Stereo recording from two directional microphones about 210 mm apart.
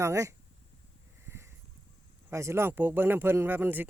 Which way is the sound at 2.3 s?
15° right (ahead or behind).